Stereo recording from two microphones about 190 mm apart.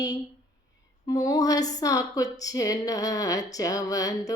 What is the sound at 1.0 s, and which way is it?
Music, 20° left (ahead or behind).